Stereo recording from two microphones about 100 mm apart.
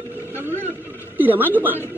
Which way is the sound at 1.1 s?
20° right (ahead or behind).